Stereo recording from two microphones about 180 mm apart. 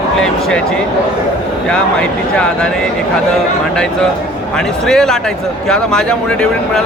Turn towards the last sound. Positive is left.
turn(degrees=5)  # may be behind; listen again after turning